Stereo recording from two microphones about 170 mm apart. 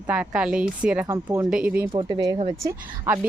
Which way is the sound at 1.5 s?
10° right (ahead or behind).